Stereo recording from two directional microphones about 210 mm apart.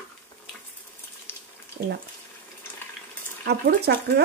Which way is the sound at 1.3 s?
10° left (ahead or behind).